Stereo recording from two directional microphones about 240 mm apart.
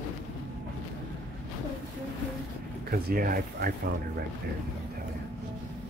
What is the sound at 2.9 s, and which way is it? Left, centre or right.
Speech, right.